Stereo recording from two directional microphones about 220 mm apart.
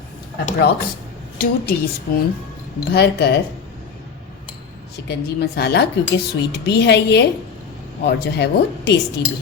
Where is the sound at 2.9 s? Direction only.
50° left (ahead or behind).